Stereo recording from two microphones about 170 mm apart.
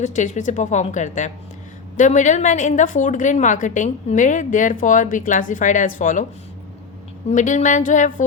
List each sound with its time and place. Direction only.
0.0 s a woman's voice: 45° left (ahead or behind)
7.3 s a woman's voice: 45° left (ahead or behind)